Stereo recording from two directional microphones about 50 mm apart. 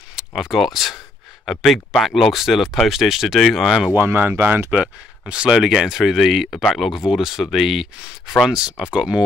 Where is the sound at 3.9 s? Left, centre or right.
Right.